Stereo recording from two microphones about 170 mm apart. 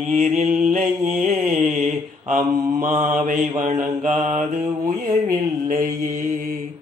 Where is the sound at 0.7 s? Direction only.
50° right (ahead or behind).